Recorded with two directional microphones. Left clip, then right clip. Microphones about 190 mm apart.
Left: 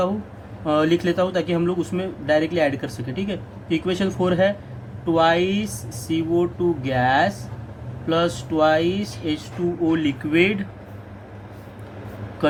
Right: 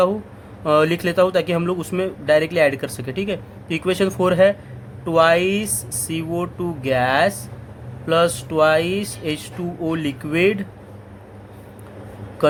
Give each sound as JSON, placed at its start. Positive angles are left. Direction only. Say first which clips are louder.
{"t": 0.6, "sound": "speech", "louder": "right 3 dB", "side_deg": -60}